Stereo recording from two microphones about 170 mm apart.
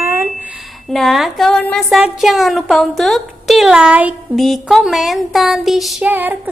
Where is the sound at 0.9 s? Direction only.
Centre (ahead or behind).